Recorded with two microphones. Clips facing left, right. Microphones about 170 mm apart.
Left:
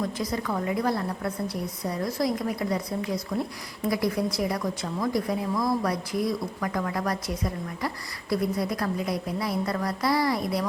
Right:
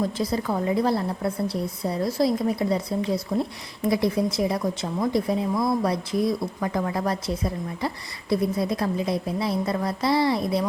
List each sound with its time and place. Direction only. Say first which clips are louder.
0.0 s speech: right 4 dB; 30° right (ahead or behind)